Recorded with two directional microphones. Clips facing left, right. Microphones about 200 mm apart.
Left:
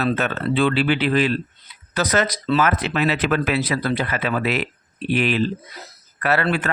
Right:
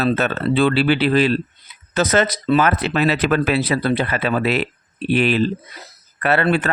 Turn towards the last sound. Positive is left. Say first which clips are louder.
# right 3 dB
turn(degrees=-30)  # may be behind; listen again after turning